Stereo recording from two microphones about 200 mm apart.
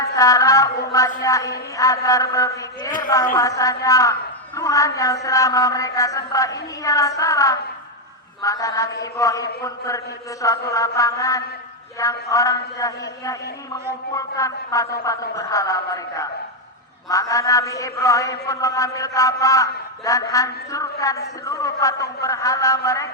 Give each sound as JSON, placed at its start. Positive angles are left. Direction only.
{"t": 0.0, "sound": "a man's voice", "side_deg": 15}